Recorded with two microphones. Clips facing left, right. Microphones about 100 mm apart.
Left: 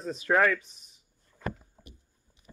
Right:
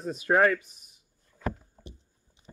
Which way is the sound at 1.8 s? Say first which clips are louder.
Right 5 dB; 30° right (ahead or behind).